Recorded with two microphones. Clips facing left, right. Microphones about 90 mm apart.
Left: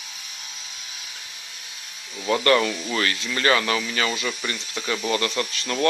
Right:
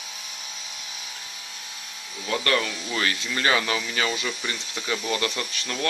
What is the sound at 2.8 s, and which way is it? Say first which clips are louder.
Speech: left 2 dB; 10° right (ahead or behind).